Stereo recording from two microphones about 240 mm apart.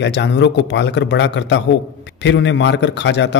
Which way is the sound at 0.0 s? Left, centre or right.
Left.